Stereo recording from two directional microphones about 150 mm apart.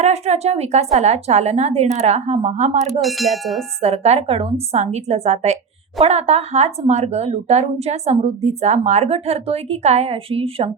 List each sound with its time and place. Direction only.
0.0 s speech: 45° right (ahead or behind)
3.0 s ding: centre (ahead or behind)
3.8 s speech: 45° right (ahead or behind)